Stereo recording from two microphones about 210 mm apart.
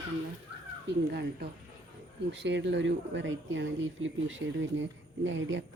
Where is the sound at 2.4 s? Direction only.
60° right (ahead or behind).